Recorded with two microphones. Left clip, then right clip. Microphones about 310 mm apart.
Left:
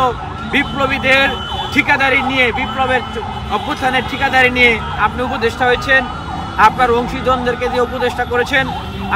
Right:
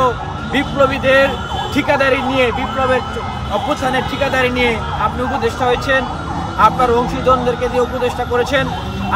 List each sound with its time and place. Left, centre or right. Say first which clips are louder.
0.5 s speech: right 1 dB; centre